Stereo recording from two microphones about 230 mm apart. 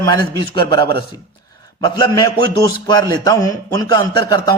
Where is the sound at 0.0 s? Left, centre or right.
Centre.